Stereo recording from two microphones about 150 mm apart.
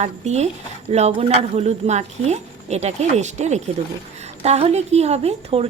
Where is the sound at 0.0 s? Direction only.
50° right (ahead or behind).